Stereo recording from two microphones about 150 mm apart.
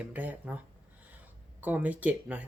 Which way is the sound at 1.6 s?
10° right (ahead or behind).